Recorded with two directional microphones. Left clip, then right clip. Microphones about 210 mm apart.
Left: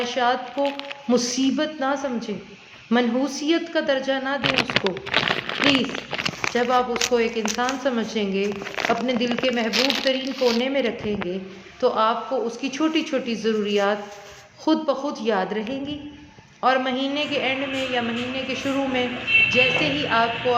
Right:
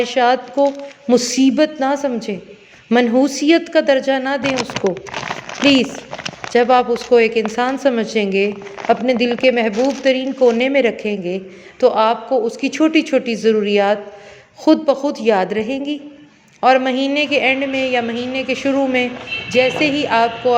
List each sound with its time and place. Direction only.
0.0 s a woman's voice: 35° right (ahead or behind)
4.4 s speech: 10° right (ahead or behind)
5.8 s a sound: 20° right (ahead or behind)
6.5 s a woman's voice: 35° right (ahead or behind)